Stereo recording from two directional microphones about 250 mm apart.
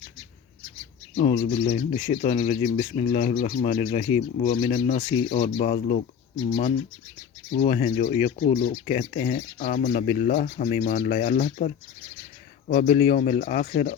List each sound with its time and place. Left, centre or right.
1.1 s speech: left
7.6 s speech: left